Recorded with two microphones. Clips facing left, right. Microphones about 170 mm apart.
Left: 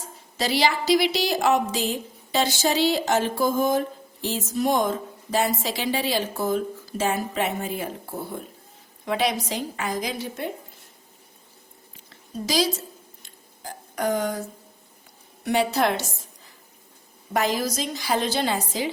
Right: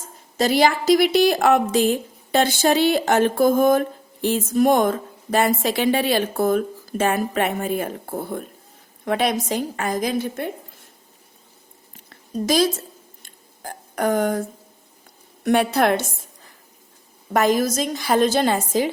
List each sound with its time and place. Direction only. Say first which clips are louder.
0.3 s a woman's voice: right 5 dB; 50° right (ahead or behind)
12.0 s a sound: right 7 dB; 50° right (ahead or behind)
15.4 s a woman's voice: right 4 dB; 55° right (ahead or behind)
17.3 s a woman's voice: right 6 dB; 50° right (ahead or behind)